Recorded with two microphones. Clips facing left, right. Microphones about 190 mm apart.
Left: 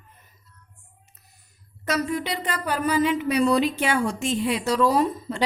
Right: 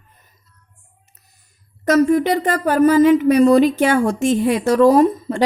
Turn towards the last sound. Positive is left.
turn(degrees=-50)  # may be behind; listen again after turning